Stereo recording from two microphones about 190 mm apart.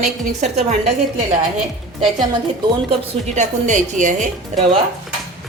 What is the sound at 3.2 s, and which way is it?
A woman's voice, 40° right (ahead or behind).